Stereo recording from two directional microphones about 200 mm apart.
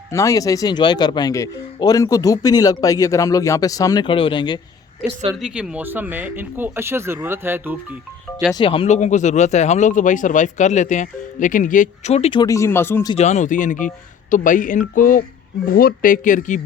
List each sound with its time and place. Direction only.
0.1 s a man's voice: 15° left (ahead or behind)
5.4 s speech: 5° right (ahead or behind)
8.5 s speech: 25° left (ahead or behind)
13.1 s speech: 35° left (ahead or behind)